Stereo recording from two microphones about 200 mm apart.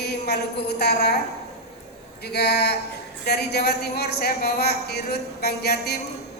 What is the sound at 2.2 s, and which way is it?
A woman's voice, 55° left (ahead or behind).